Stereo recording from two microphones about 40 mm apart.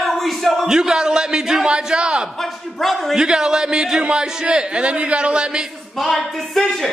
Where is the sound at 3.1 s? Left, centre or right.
Centre.